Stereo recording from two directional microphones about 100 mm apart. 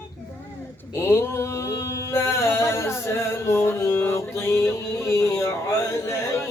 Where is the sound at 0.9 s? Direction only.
25° left (ahead or behind).